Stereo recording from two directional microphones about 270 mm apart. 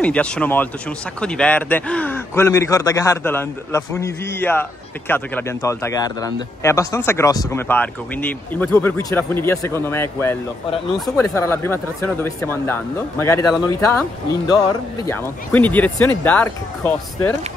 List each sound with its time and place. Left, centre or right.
0.0 s speech: centre